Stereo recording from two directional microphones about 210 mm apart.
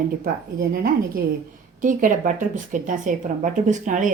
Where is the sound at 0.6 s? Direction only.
45° right (ahead or behind).